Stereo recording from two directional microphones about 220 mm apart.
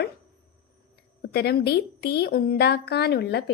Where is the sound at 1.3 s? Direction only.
50° left (ahead or behind).